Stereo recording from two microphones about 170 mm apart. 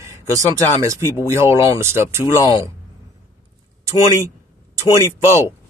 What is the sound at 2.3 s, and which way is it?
Speech, 20° left (ahead or behind).